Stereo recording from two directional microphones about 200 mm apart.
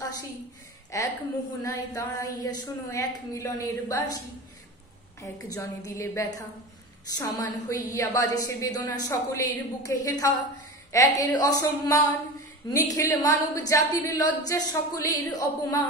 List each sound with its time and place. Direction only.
0.9 s a woman's voice: 15° left (ahead or behind)
5.2 s a woman's voice: 15° left (ahead or behind)